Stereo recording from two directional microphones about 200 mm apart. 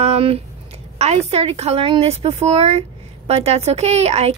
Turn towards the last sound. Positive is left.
turn(degrees=-30)  # may be behind; listen again after turning